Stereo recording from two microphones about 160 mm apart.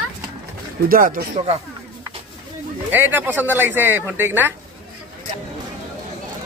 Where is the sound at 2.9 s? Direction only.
10° right (ahead or behind).